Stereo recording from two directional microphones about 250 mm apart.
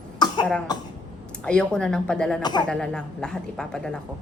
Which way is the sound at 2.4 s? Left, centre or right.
Centre.